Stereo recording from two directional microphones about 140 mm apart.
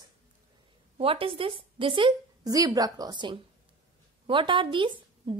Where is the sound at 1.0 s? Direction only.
40° right (ahead or behind).